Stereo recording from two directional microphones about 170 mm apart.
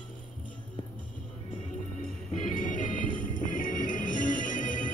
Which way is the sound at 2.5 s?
50° left (ahead or behind).